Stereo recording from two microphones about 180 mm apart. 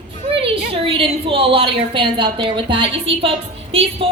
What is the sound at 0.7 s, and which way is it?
A woman's voice, 30° right (ahead or behind).